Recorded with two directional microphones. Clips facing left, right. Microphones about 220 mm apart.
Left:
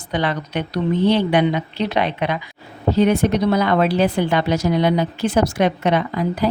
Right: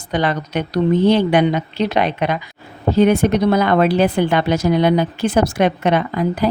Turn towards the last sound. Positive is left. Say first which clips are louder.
# right 2 dB
turn(degrees=-55)  # may be behind; listen again after turning